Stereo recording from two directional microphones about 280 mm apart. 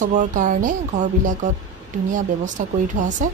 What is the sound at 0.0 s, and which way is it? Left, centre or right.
Speech, right.